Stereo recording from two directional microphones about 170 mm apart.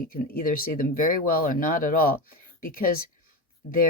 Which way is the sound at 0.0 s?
55° left (ahead or behind).